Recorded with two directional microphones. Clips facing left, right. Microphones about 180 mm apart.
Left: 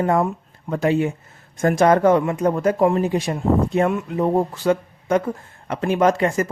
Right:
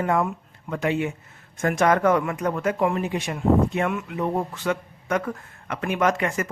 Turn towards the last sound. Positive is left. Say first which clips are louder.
# left 5 dB
turn(degrees=30)  # may be behind; listen again after turning